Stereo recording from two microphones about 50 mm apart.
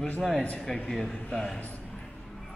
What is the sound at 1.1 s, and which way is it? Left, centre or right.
Speech, centre.